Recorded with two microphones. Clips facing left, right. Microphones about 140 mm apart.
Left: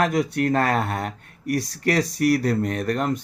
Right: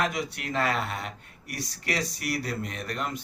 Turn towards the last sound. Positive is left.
turn(degrees=45)  # may be behind; listen again after turning